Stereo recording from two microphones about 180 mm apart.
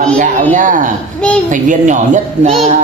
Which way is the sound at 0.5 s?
45° right (ahead or behind).